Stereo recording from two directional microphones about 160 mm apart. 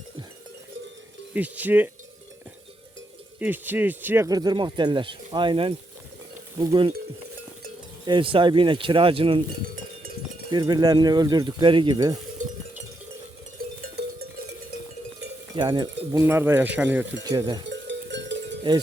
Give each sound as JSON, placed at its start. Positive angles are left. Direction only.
{"t": 1.3, "sound": "speech", "side_deg": -10}
{"t": 3.4, "sound": "speech", "side_deg": -10}
{"t": 8.0, "sound": "speech", "side_deg": -30}
{"t": 10.5, "sound": "speech", "side_deg": -25}
{"t": 15.5, "sound": "speech", "side_deg": -30}
{"t": 16.2, "sound": "speech", "side_deg": -15}
{"t": 17.2, "sound": "speech", "side_deg": -25}
{"t": 17.7, "sound": "cowbell", "side_deg": -90}